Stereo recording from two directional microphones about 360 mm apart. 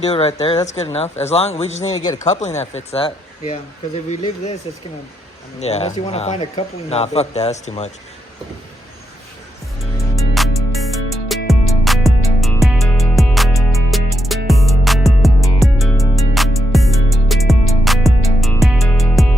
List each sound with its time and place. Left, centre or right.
0.1 s speech: centre
5.5 s speech: centre
10.2 s music: centre